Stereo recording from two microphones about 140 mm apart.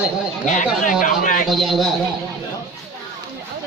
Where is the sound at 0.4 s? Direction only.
60° left (ahead or behind).